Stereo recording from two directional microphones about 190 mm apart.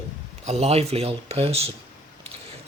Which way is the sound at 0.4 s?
35° right (ahead or behind).